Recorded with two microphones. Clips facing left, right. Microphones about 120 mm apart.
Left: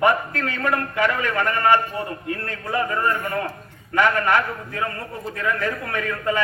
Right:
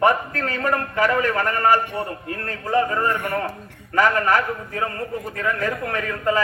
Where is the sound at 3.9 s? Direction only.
40° right (ahead or behind).